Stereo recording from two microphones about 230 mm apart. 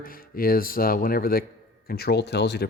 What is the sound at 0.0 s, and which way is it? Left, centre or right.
Speech, left.